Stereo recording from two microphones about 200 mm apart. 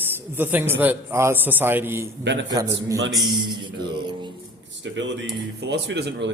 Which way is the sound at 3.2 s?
20° right (ahead or behind).